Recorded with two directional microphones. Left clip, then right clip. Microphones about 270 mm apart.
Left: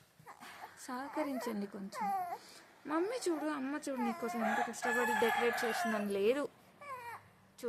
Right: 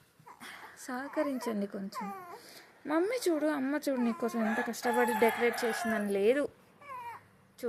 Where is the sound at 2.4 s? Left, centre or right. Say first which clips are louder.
Right 4 dB; centre.